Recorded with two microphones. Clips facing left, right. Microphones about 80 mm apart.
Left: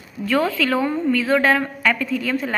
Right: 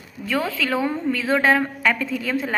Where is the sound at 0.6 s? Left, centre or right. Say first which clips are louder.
Left 3 dB; centre.